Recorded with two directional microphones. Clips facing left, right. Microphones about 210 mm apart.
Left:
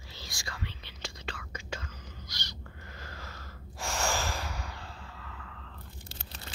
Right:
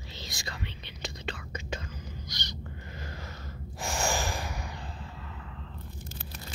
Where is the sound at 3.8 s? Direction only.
15° right (ahead or behind).